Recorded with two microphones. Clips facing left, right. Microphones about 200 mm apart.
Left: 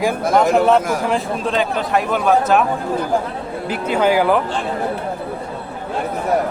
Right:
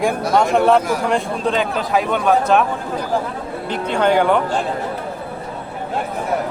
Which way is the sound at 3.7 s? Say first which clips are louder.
Even; 5° left (ahead or behind).